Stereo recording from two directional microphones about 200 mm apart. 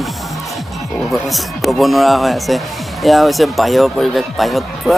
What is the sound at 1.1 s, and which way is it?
Speech, centre (ahead or behind).